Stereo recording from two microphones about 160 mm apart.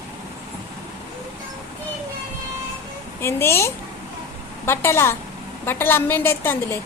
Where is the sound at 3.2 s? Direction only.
15° left (ahead or behind).